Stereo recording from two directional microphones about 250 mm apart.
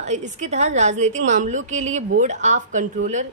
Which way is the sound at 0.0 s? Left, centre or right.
Right.